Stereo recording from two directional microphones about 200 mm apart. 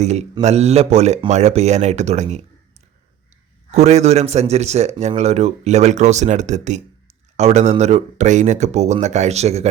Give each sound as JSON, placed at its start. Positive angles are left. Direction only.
{"t": 0.0, "sound": "a man's voice", "side_deg": -35}
{"t": 3.7, "sound": "a man's voice", "side_deg": -35}